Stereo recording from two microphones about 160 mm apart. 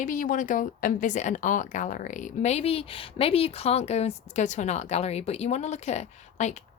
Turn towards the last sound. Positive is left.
turn(degrees=45)  # may be behind; listen again after turning